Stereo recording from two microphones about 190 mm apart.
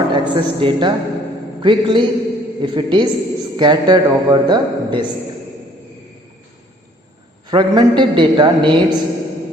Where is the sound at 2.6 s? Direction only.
25° right (ahead or behind).